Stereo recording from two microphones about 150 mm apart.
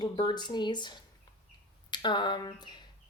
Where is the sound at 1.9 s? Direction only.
30° left (ahead or behind).